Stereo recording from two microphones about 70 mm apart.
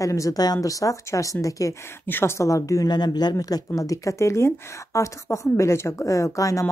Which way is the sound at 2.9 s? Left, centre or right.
Left.